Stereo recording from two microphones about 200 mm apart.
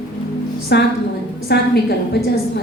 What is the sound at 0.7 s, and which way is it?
Speech, 55° left (ahead or behind).